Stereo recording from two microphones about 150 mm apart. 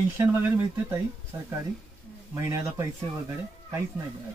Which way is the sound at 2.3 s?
20° right (ahead or behind).